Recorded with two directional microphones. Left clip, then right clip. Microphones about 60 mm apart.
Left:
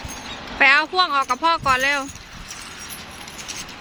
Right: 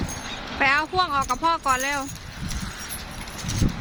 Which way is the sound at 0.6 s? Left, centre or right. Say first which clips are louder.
Left 5 dB; centre.